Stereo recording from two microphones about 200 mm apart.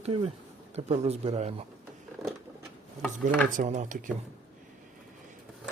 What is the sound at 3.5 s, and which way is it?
Speech, 35° right (ahead or behind).